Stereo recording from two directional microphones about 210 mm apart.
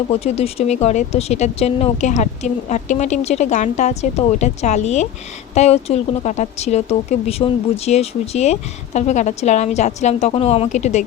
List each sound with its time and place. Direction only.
0.1 s speech: 30° left (ahead or behind)